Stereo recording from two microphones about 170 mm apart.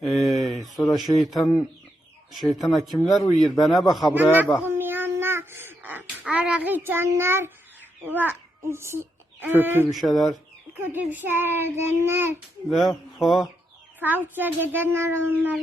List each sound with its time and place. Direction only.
0.0 s a sound: centre (ahead or behind)
0.9 s speech: centre (ahead or behind)
4.1 s a child's voice: 10° right (ahead or behind)
4.5 s babbling: 10° right (ahead or behind)
6.7 s a child's voice: 10° right (ahead or behind)
9.9 s speech: centre (ahead or behind)
10.8 s a child's voice: 10° right (ahead or behind)
13.1 s speech: centre (ahead or behind)
14.0 s a child's voice: 10° right (ahead or behind)